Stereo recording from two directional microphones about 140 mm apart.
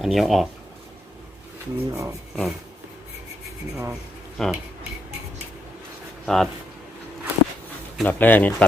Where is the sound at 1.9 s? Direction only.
20° right (ahead or behind).